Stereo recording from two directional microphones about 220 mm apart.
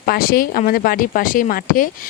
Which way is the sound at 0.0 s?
40° left (ahead or behind).